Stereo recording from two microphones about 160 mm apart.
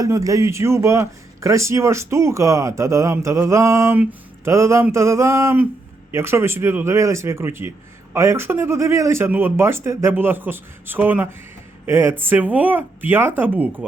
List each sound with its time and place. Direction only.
0.0 s speech: 20° right (ahead or behind)